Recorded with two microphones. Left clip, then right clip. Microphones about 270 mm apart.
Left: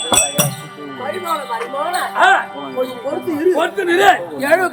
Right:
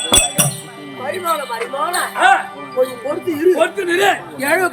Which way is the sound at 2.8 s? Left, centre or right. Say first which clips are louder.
Right 2 dB; centre.